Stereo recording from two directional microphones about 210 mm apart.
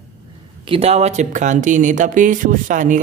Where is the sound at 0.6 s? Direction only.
25° right (ahead or behind).